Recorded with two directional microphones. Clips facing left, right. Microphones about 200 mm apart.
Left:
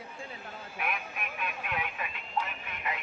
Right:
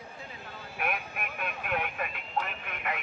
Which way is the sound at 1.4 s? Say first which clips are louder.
Right 3 dB; 50° right (ahead or behind).